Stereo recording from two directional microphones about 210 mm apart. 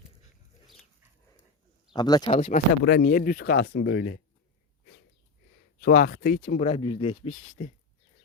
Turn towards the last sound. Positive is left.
turn(degrees=35)  # may be behind; listen again after turning